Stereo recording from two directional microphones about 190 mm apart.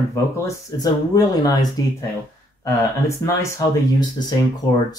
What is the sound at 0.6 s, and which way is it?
Speech, 20° left (ahead or behind).